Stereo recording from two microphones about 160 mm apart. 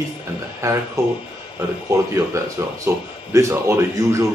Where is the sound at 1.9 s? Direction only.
20° right (ahead or behind).